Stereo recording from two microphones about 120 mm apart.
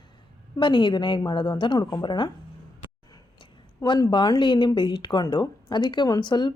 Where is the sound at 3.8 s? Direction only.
40° left (ahead or behind).